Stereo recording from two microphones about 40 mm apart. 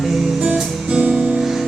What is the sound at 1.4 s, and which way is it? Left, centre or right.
Music, centre.